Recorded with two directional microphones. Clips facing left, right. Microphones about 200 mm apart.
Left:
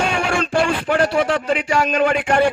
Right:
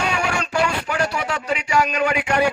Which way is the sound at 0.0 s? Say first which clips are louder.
Left 3 dB; 50° left (ahead or behind).